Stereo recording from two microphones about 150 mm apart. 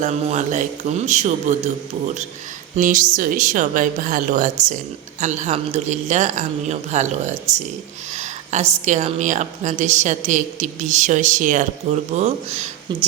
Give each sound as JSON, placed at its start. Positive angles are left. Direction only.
{"t": 0.0, "sound": "a woman's voice", "side_deg": -50}
{"t": 2.7, "sound": "a woman's voice", "side_deg": -60}
{"t": 8.1, "sound": "a sound", "side_deg": -50}
{"t": 8.8, "sound": "a woman's voice", "side_deg": -50}
{"t": 12.9, "sound": "speech", "side_deg": -30}